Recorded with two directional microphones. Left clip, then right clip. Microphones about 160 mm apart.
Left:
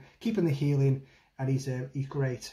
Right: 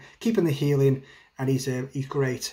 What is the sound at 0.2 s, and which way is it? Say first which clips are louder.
Speech: right 6 dB; 10° right (ahead or behind).